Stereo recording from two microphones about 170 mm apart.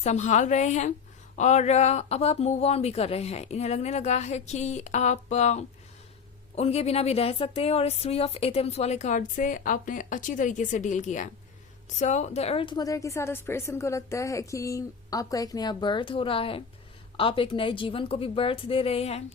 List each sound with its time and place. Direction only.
0.0 s a woman's voice: 45° left (ahead or behind)